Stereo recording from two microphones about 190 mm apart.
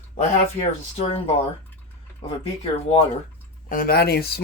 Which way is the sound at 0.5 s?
30° left (ahead or behind).